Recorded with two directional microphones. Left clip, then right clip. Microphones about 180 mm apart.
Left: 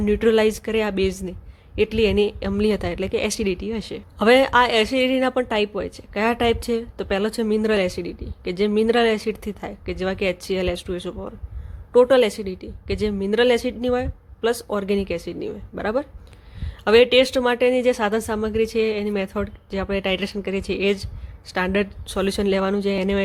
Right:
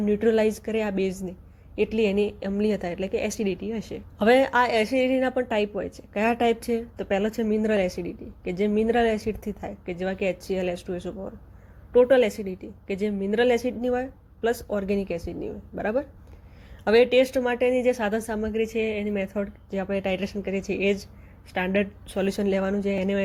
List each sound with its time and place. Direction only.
0.0 s a woman's voice: 20° left (ahead or behind)